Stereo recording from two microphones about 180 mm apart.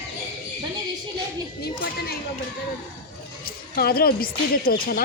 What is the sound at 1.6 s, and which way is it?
Speech, 60° left (ahead or behind).